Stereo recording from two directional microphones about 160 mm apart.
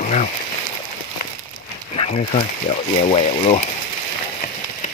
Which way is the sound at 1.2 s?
60° left (ahead or behind).